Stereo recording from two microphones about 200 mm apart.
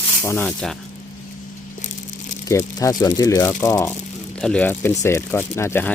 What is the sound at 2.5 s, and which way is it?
Speech, 15° left (ahead or behind).